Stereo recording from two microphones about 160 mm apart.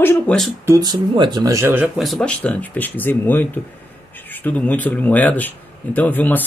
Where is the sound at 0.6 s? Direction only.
25° right (ahead or behind).